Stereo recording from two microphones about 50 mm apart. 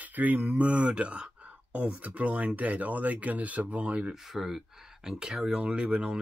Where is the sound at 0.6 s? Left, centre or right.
Right.